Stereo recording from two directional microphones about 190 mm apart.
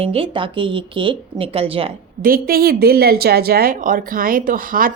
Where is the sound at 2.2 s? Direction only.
50° right (ahead or behind).